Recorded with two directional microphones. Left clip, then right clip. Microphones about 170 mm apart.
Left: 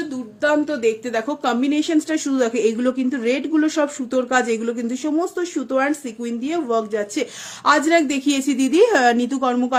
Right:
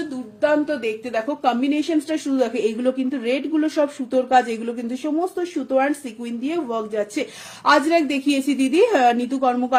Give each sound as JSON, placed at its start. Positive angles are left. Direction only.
{"t": 0.4, "sound": "speech", "side_deg": 40}